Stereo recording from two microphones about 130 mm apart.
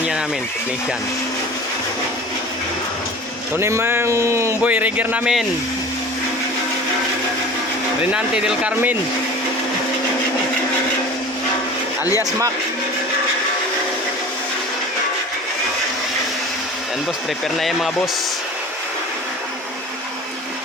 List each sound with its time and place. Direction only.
3.6 s speech: 20° right (ahead or behind); by 5.5 s 5° right (ahead or behind)
8.1 s speech: 5° right (ahead or behind)
17.6 s speech: centre (ahead or behind)